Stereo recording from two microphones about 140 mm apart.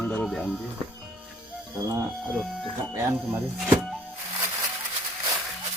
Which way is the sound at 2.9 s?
20° right (ahead or behind).